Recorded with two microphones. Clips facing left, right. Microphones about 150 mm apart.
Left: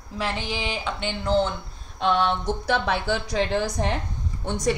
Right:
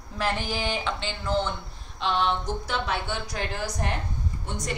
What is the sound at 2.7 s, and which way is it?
Speech, 90° left.